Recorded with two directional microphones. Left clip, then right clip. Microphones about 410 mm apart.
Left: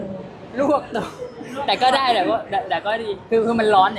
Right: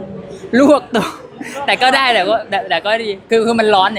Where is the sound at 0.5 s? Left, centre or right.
Right.